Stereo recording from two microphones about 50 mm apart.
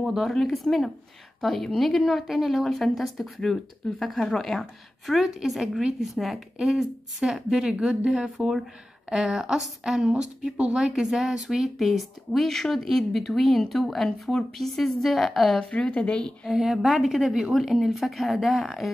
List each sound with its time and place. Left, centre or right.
0.0 s a woman's voice: centre
15.5 s a woman's voice: centre
16.5 s speech: centre